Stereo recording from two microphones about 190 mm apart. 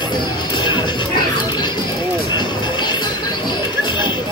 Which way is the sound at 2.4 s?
25° left (ahead or behind).